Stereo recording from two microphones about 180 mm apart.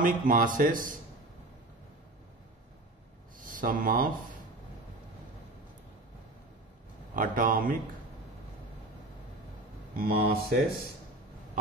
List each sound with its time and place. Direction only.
0.0 s speech: 50° right (ahead or behind)
3.3 s speech: 50° right (ahead or behind)
7.2 s speech: 50° right (ahead or behind)
9.9 s speech: 55° right (ahead or behind)